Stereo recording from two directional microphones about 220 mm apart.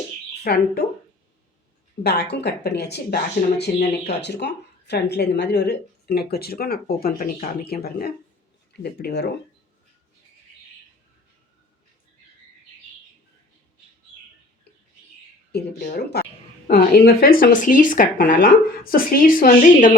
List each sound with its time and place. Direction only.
0.4 s speech: 45° left (ahead or behind)
2.0 s speech: 45° left (ahead or behind)
15.5 s speech: 45° left (ahead or behind)